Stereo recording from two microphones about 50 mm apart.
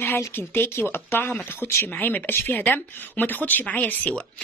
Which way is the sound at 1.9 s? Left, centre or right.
Left.